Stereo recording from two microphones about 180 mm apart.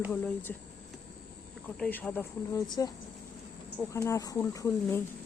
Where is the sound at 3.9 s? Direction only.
15° left (ahead or behind).